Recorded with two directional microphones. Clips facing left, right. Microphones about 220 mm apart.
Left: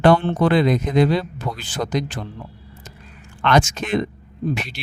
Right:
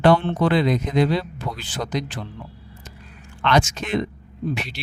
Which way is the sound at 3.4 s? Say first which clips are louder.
Left 2 dB; 50° left (ahead or behind).